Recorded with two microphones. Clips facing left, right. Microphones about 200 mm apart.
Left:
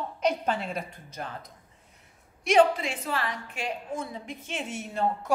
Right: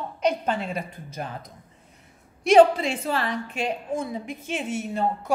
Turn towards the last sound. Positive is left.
turn(degrees=0)  # may be behind; listen again after turning